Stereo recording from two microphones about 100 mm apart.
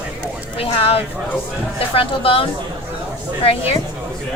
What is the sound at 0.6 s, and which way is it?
Speech, 75° left (ahead or behind).